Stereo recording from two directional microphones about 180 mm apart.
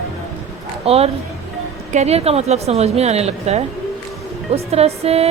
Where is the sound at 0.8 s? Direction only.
35° right (ahead or behind).